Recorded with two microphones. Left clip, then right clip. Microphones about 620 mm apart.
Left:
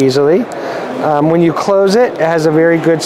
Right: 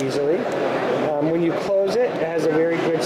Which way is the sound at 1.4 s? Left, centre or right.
Left.